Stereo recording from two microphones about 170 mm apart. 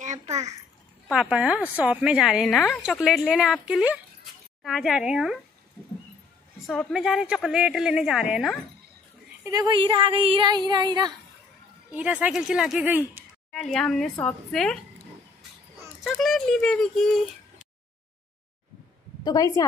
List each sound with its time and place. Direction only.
0.0 s a sound: 45° right (ahead or behind)
1.1 s a woman's voice: 5° right (ahead or behind)
6.9 s a woman's voice: 5° right (ahead or behind)
9.4 s speech: 20° right (ahead or behind)
11.9 s speech: 10° right (ahead or behind)
13.5 s a woman's voice: 5° left (ahead or behind)
16.0 s a woman's voice: centre (ahead or behind)
19.2 s a woman's voice: 20° left (ahead or behind)